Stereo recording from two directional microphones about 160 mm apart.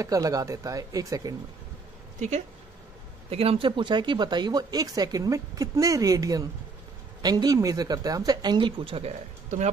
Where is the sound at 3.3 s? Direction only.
35° right (ahead or behind).